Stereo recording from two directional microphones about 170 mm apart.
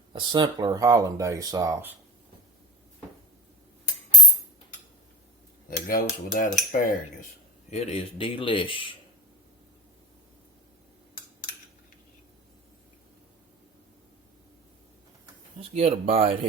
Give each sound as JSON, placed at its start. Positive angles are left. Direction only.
{"t": 0.1, "sound": "speech", "side_deg": -30}
{"t": 5.6, "sound": "cutlery", "side_deg": 55}
{"t": 7.7, "sound": "a man's voice", "side_deg": 40}
{"t": 15.7, "sound": "speech", "side_deg": -40}